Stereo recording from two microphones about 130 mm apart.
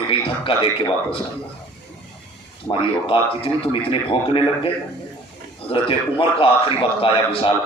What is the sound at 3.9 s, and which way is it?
Speech, 45° left (ahead or behind).